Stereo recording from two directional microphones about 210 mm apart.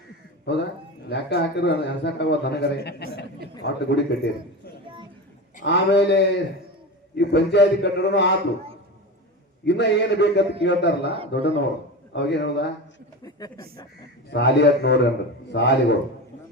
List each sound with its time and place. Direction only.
0.5 s a man's voice: 55° left (ahead or behind)
9.6 s a man's voice: 55° left (ahead or behind)
14.3 s a man's voice: 55° left (ahead or behind)